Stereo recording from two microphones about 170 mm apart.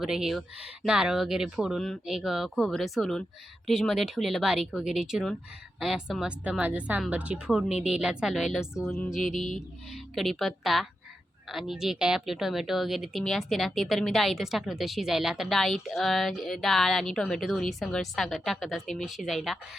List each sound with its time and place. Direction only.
0.0 s a woman's voice: 5° right (ahead or behind)